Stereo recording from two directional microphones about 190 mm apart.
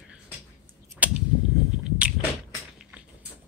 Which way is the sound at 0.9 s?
5° right (ahead or behind).